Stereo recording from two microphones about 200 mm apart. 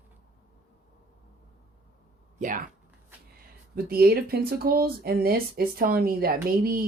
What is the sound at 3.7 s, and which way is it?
Speech, 50° right (ahead or behind).